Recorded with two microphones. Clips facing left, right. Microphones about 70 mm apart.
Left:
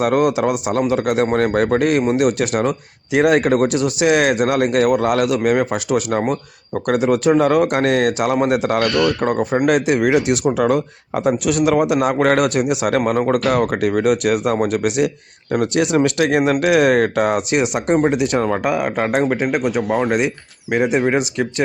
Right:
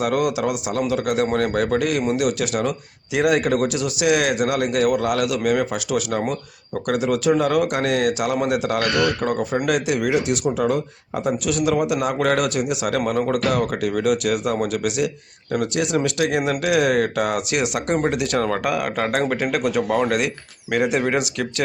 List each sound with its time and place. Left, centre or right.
0.0 s a man's voice: left
10.6 s a man's voice: left
15.8 s speech: left